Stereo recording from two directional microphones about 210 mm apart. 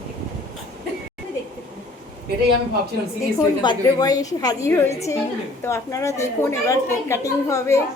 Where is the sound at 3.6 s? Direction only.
20° left (ahead or behind).